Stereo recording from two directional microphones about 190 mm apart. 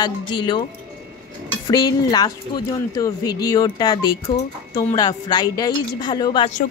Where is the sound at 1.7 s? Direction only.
20° left (ahead or behind).